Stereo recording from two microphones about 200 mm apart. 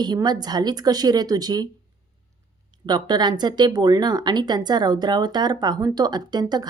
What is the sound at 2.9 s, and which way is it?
Speech, 20° right (ahead or behind).